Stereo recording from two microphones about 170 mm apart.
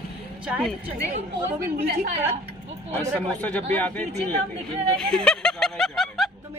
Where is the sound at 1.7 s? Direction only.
65° right (ahead or behind).